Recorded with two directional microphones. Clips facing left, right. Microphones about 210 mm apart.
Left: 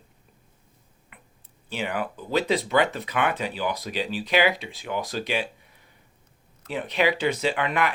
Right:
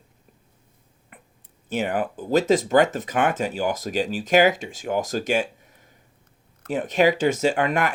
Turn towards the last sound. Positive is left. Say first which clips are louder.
# right 3 dB
turn(degrees=-45)  # may be behind; listen again after turning